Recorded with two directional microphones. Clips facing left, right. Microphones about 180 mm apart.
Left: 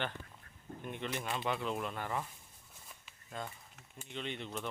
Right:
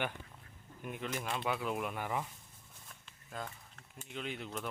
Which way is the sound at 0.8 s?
5° right (ahead or behind).